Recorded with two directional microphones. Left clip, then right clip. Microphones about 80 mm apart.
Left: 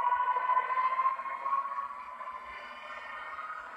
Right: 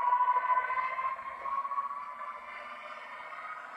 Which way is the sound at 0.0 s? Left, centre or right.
Right.